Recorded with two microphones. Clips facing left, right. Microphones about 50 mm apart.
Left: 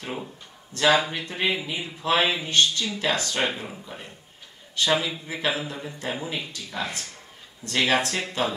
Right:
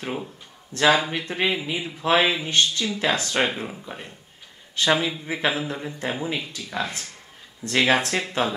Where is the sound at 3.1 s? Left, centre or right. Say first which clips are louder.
Right 3 dB; right.